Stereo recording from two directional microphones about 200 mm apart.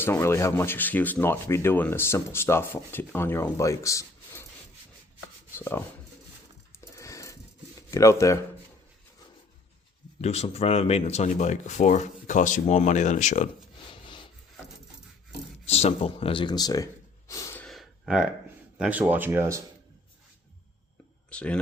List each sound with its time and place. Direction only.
0.0 s speech: 10° left (ahead or behind)
5.5 s rub: 10° left (ahead or behind)
6.9 s a sound: 15° left (ahead or behind)
7.8 s speech: 15° left (ahead or behind)
10.2 s speech: 30° left (ahead or behind)
13.8 s rub: 25° left (ahead or behind)
15.6 s gasp: 30° left (ahead or behind); by 18.3 s centre (ahead or behind)
18.8 s speech: 10° right (ahead or behind)
21.2 s speech: 5° left (ahead or behind)